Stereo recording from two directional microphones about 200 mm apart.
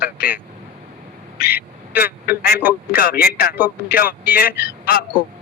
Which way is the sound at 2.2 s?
50° left (ahead or behind).